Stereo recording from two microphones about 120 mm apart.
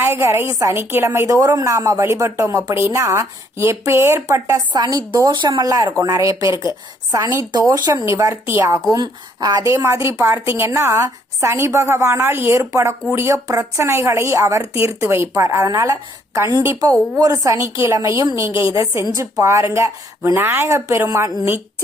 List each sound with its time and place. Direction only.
0.0 s a woman's voice: 20° right (ahead or behind)
4.7 s a woman's voice: 35° right (ahead or behind)
8.9 s a woman's voice: 35° right (ahead or behind)